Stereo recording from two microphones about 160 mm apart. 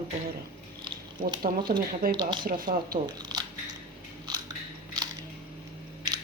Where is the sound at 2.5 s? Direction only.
65° right (ahead or behind).